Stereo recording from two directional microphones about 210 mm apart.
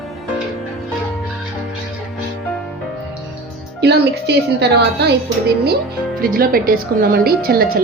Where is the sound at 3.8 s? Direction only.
50° right (ahead or behind).